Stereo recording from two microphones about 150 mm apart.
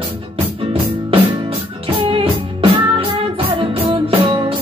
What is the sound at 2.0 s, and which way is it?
Music, 35° right (ahead or behind).